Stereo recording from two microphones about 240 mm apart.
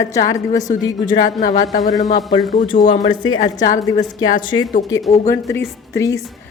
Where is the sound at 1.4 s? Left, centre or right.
Left.